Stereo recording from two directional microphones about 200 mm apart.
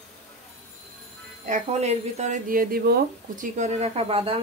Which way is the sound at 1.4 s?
35° right (ahead or behind).